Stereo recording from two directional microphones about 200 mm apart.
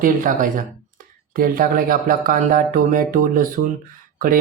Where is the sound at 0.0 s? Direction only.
40° right (ahead or behind).